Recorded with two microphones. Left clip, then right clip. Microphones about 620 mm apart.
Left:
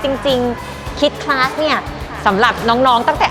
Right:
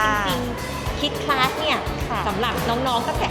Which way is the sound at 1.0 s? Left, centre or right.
Left.